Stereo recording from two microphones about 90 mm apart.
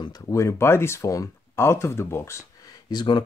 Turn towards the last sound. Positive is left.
turn(degrees=55)  # may be behind; listen again after turning